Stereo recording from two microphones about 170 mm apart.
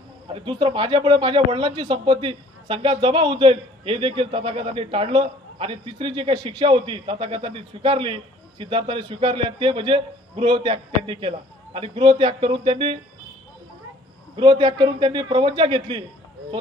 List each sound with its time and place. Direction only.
0.3 s speech: 30° right (ahead or behind)
14.3 s a man's voice: 30° right (ahead or behind)